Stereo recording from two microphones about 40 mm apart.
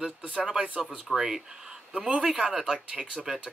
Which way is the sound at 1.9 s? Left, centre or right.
Right.